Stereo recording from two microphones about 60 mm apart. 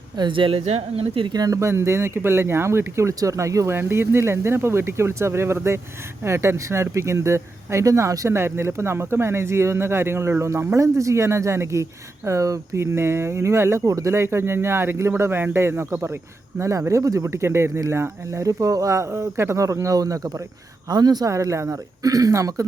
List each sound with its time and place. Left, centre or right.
1.5 s speech: right
3.2 s speech: right
3.7 s speech: right
8.3 s speech: right
13.8 s speech: right
14.1 s speech: right
16.6 s speech: right
21.0 s speech: right